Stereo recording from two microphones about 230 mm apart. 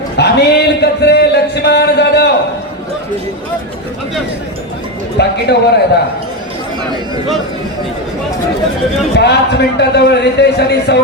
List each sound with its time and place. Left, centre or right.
0.2 s a sound: left
5.1 s a man's voice: left
9.1 s a man's voice: left